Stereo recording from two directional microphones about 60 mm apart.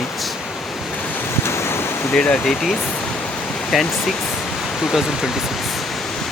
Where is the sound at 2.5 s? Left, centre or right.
Centre.